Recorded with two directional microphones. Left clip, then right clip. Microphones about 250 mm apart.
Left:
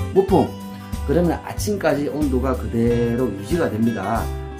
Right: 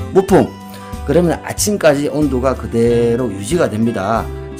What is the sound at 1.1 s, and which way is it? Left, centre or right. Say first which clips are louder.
Speech: right 6 dB; right.